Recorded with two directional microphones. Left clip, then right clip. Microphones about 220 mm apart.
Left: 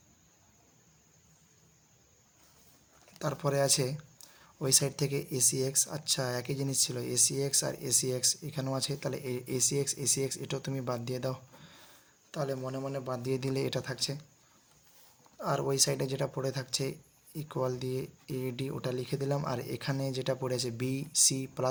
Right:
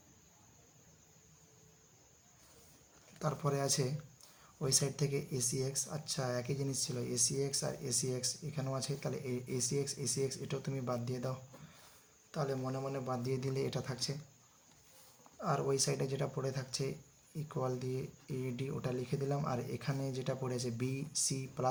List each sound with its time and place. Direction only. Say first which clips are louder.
3.2 s speech: left 6 dB; 35° left (ahead or behind)
15.4 s speech: left 4 dB; 35° left (ahead or behind)